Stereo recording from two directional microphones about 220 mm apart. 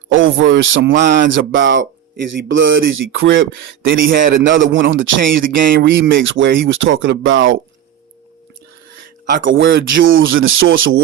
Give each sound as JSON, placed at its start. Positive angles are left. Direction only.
{"t": 0.1, "sound": "speech", "side_deg": -60}
{"t": 3.8, "sound": "speech", "side_deg": -40}
{"t": 4.4, "sound": "speech", "side_deg": -55}
{"t": 5.2, "sound": "speech", "side_deg": -40}
{"t": 6.2, "sound": "speech", "side_deg": -55}
{"t": 9.3, "sound": "speech", "side_deg": -60}